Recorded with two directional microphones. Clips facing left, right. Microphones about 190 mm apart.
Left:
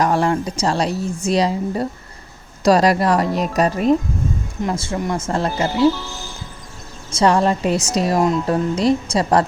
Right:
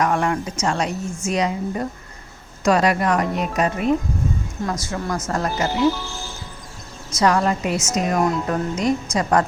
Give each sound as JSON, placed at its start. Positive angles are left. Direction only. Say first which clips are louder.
{"t": 0.0, "sound": "speech", "louder": "left 3 dB", "side_deg": 35}
{"t": 7.1, "sound": "speech", "louder": "left 3 dB", "side_deg": 30}